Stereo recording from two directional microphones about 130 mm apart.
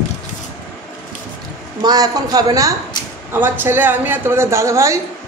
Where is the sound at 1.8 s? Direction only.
30° right (ahead or behind).